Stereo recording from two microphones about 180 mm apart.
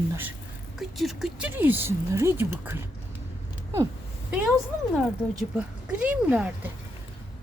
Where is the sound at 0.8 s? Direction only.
Centre (ahead or behind).